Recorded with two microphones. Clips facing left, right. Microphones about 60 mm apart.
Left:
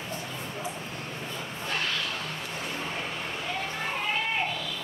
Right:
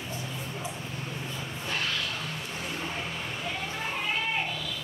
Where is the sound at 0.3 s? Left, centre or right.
Centre.